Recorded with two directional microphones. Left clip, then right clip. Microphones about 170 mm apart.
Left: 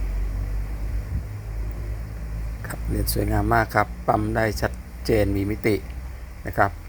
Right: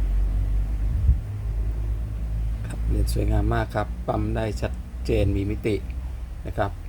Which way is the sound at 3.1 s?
15° left (ahead or behind).